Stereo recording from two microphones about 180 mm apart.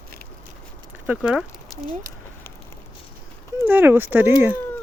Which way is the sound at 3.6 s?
10° right (ahead or behind).